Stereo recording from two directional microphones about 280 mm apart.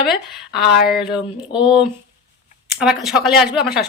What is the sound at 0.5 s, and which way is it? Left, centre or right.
Speech, left.